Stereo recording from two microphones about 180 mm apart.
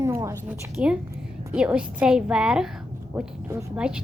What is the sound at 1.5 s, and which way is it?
A woman's voice, 5° right (ahead or behind).